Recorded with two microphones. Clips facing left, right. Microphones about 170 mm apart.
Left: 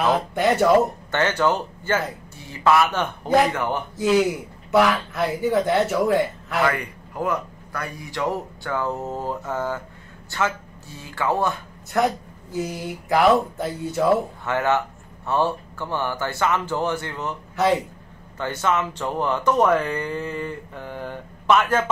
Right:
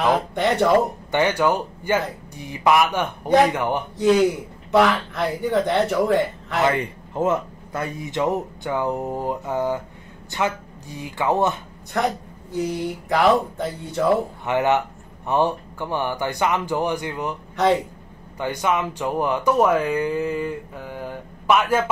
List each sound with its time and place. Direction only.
0.3 s speech: 5° left (ahead or behind)
1.1 s speech: 10° right (ahead or behind)
3.9 s speech: 5° left (ahead or behind)
6.6 s a man's voice: 25° right (ahead or behind)
11.9 s speech: 5° left (ahead or behind)
14.4 s speech: 20° right (ahead or behind)
18.4 s speech: 15° right (ahead or behind)